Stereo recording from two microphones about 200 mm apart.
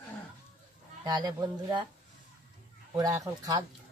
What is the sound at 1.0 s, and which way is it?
Speech, 20° right (ahead or behind).